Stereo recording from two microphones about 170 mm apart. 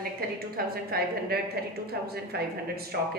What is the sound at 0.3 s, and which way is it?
A woman's voice, 60° right (ahead or behind).